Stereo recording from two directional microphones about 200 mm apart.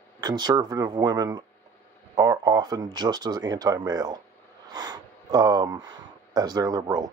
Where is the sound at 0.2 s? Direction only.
20° right (ahead or behind).